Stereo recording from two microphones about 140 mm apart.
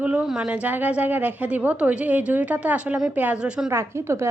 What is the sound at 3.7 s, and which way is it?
Speech, 20° right (ahead or behind).